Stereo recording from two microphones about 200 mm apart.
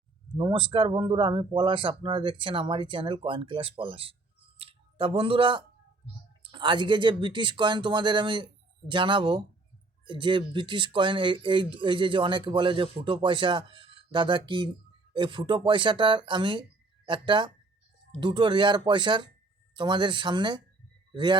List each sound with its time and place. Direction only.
0.3 s speech: 25° right (ahead or behind)
4.5 s a sound: 30° right (ahead or behind)
6.4 s a man's voice: 25° right (ahead or behind)